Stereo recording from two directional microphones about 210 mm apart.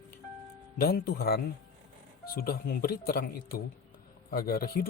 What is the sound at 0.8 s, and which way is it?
Speech, 45° left (ahead or behind).